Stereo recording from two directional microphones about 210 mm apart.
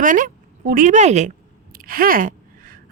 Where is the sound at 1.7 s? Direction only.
45° right (ahead or behind).